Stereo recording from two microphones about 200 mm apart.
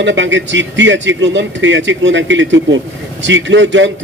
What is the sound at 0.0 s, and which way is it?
A man's voice, 65° right (ahead or behind).